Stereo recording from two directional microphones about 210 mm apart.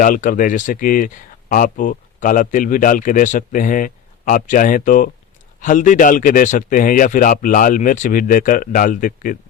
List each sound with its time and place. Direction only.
0.0 s speech: 40° left (ahead or behind)